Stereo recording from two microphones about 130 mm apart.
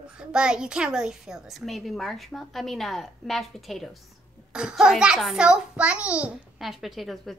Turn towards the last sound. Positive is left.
turn(degrees=0)  # may be behind; listen again after turning